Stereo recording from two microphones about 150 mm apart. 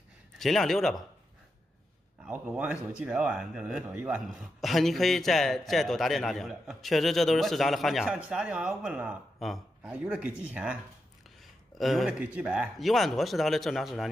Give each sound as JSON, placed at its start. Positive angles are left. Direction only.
{"t": 0.4, "sound": "speech", "side_deg": 0}
{"t": 2.2, "sound": "speech", "side_deg": -5}
{"t": 11.8, "sound": "speech", "side_deg": 0}